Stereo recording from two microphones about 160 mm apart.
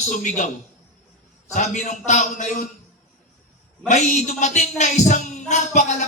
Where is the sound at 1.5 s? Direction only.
50° left (ahead or behind).